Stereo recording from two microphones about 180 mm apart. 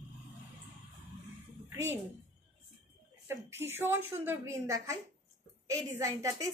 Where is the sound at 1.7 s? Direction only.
15° right (ahead or behind).